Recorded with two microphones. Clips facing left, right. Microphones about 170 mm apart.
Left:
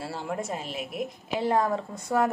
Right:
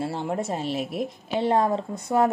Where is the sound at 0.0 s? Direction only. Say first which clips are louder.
Right 5 dB; 25° right (ahead or behind).